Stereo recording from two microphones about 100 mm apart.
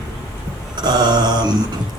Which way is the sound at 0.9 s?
45° right (ahead or behind).